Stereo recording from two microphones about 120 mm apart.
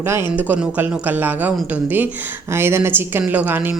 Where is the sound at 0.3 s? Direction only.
10° right (ahead or behind).